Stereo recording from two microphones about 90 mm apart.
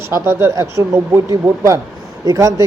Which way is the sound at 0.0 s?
30° right (ahead or behind).